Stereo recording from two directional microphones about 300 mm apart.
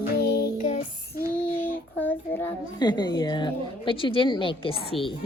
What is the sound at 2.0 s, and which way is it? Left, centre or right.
A child's voice, centre.